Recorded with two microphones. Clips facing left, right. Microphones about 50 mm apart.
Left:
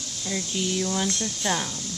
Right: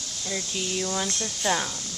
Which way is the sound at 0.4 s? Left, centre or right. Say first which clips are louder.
Left 3 dB; right.